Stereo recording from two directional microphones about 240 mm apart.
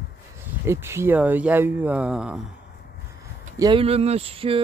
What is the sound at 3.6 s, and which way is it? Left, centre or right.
Speech, centre.